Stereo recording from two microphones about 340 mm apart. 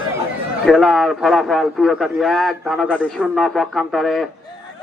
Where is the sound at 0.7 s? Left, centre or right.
Centre.